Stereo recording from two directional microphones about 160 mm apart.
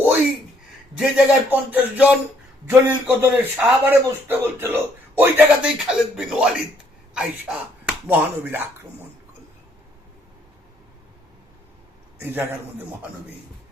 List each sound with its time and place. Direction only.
0.9 s a man's voice: 10° right (ahead or behind)
12.2 s a man's voice: 15° right (ahead or behind)